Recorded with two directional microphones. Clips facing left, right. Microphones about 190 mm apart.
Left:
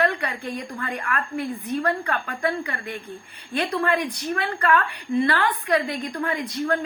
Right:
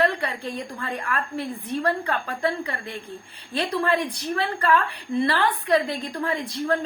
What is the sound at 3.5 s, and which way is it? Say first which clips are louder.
A woman's voice: even; 30° right (ahead or behind).